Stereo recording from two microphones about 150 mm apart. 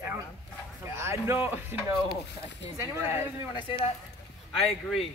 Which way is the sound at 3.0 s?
15° right (ahead or behind).